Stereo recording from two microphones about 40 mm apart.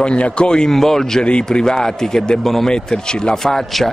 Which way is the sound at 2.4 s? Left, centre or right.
Centre.